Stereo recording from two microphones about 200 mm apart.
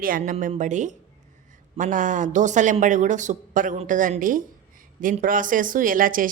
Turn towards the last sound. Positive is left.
turn(degrees=-45)  # may be behind; listen again after turning